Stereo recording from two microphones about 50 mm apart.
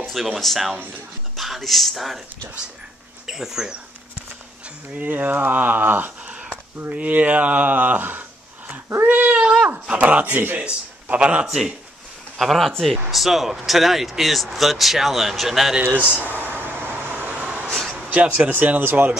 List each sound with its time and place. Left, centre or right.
0.0 s speech: centre
3.3 s speech: centre
4.9 s speech: right
6.3 s a sound: right
6.9 s speech: right
9.0 s cat: right
9.3 s a sound: centre
9.9 s a man's voice: right
11.4 s speech: centre
15.8 s air conditioning: right
17.1 s vehicle: right
18.1 s speech: right